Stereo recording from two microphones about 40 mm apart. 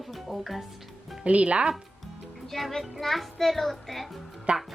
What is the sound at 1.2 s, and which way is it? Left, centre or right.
Speech, right.